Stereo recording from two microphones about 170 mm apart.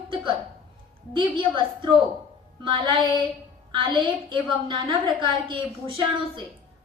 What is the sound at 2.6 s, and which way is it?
Speech, 30° right (ahead or behind).